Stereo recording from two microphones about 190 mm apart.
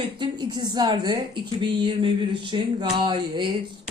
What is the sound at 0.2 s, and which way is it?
A woman's voice, 25° right (ahead or behind).